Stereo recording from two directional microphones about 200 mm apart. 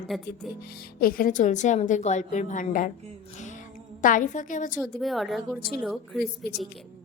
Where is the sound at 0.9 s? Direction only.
45° left (ahead or behind).